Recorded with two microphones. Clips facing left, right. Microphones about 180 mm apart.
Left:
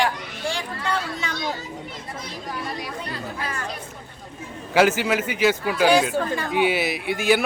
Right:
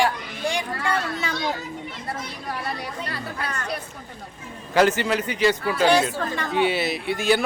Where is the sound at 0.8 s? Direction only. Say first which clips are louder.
Left 1 dB; 5° right (ahead or behind).